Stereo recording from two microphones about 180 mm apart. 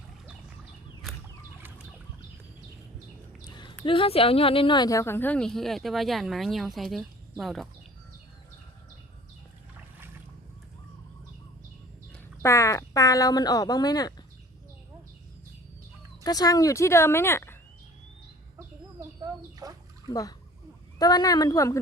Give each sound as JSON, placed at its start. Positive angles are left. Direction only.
{"t": 3.4, "sound": "a sound", "side_deg": 25}
{"t": 3.8, "sound": "a woman's voice", "side_deg": 30}
{"t": 12.4, "sound": "speech", "side_deg": 15}
{"t": 16.2, "sound": "speech", "side_deg": 20}
{"t": 18.9, "sound": "chicken", "side_deg": -20}
{"t": 20.1, "sound": "speech", "side_deg": 20}